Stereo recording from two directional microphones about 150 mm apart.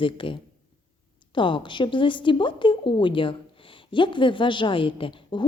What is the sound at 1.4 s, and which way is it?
Speech, 35° left (ahead or behind).